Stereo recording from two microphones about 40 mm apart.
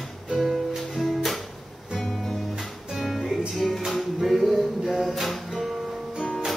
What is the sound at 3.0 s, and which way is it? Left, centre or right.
Music, centre.